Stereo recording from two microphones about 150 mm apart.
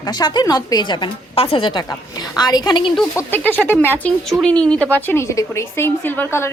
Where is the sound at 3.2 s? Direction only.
15° left (ahead or behind).